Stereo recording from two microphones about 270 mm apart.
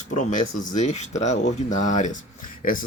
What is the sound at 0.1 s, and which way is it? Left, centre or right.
Speech, left.